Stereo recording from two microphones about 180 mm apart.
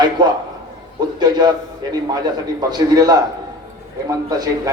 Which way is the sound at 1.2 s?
25° right (ahead or behind).